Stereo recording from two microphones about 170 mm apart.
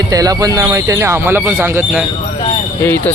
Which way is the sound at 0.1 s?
20° right (ahead or behind).